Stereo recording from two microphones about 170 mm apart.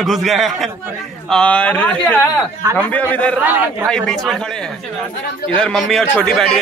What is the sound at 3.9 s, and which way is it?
A man's voice, 5° left (ahead or behind).